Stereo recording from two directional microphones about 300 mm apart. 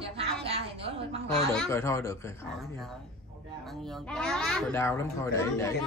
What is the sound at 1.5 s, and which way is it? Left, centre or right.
Speech, centre.